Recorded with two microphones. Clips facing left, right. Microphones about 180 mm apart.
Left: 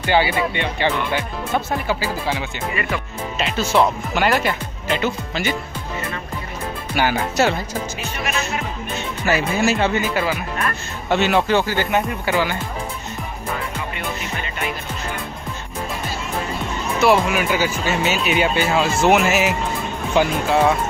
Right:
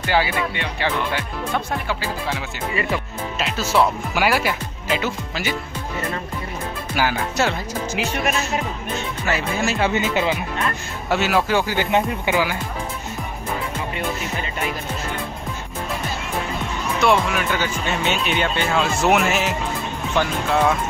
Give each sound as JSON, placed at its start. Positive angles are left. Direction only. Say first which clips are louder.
{"t": 0.1, "sound": "speech", "louder": "left 3 dB", "side_deg": 0}
{"t": 2.7, "sound": "speech", "louder": "right 2 dB", "side_deg": -30}
{"t": 3.3, "sound": "speech", "louder": "left 2 dB", "side_deg": 0}
{"t": 7.0, "sound": "speech", "louder": "left 3 dB", "side_deg": 0}
{"t": 9.3, "sound": "speech", "louder": "left 4 dB", "side_deg": 0}
{"t": 9.8, "sound": "speech", "louder": "left 1 dB", "side_deg": -10}
{"t": 10.0, "sound": "speech", "louder": "right 1 dB", "side_deg": -20}
{"t": 11.1, "sound": "speech", "louder": "left 2 dB", "side_deg": -5}
{"t": 17.0, "sound": "speech", "louder": "left 3 dB", "side_deg": 5}